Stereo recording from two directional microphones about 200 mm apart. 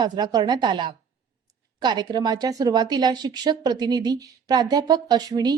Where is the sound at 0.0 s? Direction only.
20° right (ahead or behind).